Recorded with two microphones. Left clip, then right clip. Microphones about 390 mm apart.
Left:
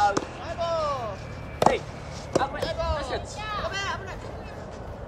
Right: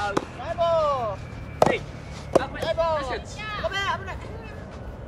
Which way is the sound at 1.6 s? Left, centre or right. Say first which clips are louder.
Right 1 dB; centre.